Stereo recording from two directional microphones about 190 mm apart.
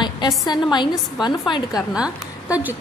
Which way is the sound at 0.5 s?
25° left (ahead or behind).